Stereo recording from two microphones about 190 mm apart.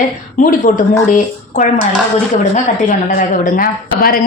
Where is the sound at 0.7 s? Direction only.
45° left (ahead or behind).